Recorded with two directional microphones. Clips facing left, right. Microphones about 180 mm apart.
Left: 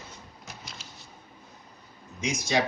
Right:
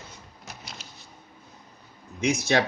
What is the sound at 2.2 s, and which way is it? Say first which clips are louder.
Speech: right 4 dB; 65° right (ahead or behind).